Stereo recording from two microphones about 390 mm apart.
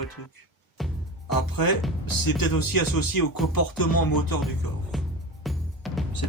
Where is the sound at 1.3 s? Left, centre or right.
Left.